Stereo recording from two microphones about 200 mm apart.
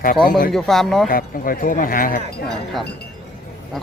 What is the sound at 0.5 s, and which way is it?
Speech, centre (ahead or behind).